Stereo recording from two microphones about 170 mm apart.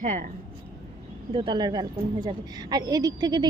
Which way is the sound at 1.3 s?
30° right (ahead or behind).